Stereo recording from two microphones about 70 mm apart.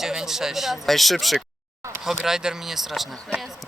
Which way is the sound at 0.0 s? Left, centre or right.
Centre.